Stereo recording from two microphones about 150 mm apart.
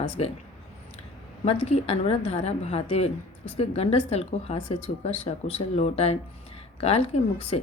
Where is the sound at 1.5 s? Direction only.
45° left (ahead or behind).